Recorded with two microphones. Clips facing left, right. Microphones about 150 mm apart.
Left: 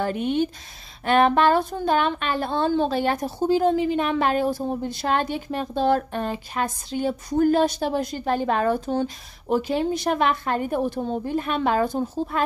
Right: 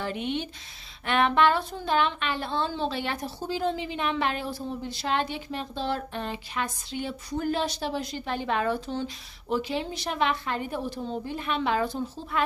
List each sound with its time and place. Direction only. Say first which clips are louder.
0.0 s a woman's voice: left 7 dB; 45° left (ahead or behind)